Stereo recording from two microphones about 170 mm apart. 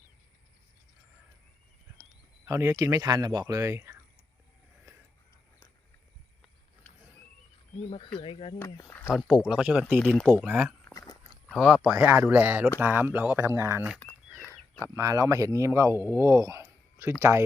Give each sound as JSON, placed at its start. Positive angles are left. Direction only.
{"t": 2.5, "sound": "speech", "side_deg": -15}
{"t": 8.2, "sound": "speech", "side_deg": 30}
{"t": 8.5, "sound": "speech", "side_deg": 10}
{"t": 9.0, "sound": "speech", "side_deg": 0}
{"t": 10.1, "sound": "speech", "side_deg": 5}
{"t": 10.3, "sound": "speech", "side_deg": -10}
{"t": 11.4, "sound": "speech", "side_deg": 0}
{"t": 14.3, "sound": "a sound", "side_deg": 10}
{"t": 14.9, "sound": "speech", "side_deg": -20}